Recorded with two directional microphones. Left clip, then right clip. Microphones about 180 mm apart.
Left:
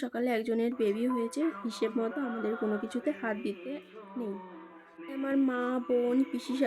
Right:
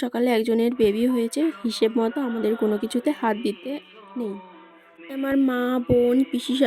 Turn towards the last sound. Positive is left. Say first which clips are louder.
# right 9 dB
turn(degrees=-45)  # may be behind; listen again after turning